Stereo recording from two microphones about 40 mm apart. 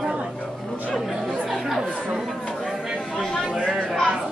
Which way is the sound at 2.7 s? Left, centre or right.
Centre.